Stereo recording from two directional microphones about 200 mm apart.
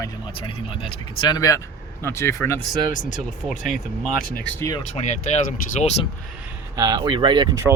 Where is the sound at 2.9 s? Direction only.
40° left (ahead or behind).